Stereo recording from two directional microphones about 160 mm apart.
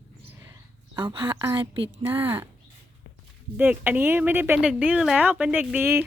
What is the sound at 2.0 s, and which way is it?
Speech, 10° right (ahead or behind).